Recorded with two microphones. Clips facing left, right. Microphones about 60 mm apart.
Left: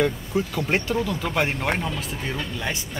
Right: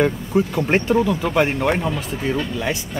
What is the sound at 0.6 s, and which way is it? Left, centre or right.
Speech, right.